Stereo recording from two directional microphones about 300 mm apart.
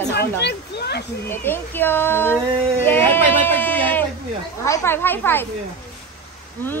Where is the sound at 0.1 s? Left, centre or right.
Left.